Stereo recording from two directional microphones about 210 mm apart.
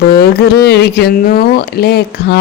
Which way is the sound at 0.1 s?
50° left (ahead or behind).